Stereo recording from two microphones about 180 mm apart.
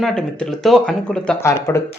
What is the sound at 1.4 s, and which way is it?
Speech, 15° left (ahead or behind).